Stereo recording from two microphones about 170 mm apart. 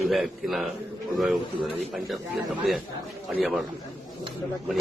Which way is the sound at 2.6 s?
Centre (ahead or behind).